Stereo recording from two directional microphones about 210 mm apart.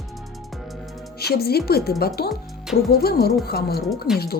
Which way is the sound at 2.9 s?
45° left (ahead or behind).